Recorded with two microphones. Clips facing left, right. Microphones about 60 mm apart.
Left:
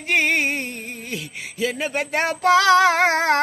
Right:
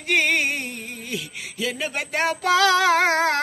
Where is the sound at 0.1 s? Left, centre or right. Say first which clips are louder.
Left 1 dB; left.